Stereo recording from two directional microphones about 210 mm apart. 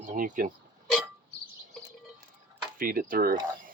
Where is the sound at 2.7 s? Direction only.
45° right (ahead or behind).